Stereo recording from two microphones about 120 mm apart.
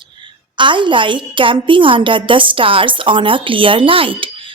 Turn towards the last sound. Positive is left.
turn(degrees=-45)  # may be behind; listen again after turning